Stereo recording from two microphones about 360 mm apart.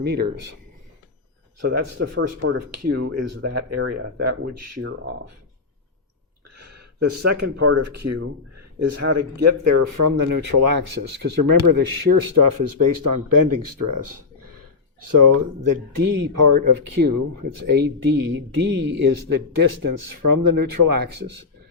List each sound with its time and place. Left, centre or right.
0.1 s speech: right
1.6 s speech: right
2.7 s speech: right
4.8 s speech: right
6.6 s a sound: right
7.3 s speech: right
14.4 s a sound: right
15.1 s speech: right
19.3 s speech: right